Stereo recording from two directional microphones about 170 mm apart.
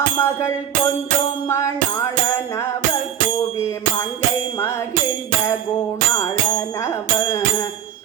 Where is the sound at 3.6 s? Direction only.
15° left (ahead or behind).